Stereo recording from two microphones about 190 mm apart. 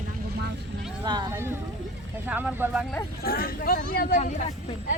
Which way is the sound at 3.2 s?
50° left (ahead or behind).